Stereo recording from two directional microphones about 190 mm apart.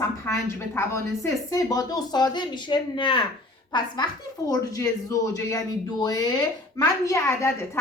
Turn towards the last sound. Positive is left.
turn(degrees=15)  # may be behind; listen again after turning